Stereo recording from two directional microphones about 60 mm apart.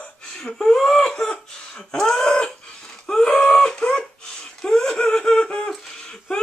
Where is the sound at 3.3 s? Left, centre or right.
Centre.